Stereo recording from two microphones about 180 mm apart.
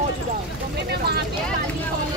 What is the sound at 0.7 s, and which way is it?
Vehicle, 65° right (ahead or behind).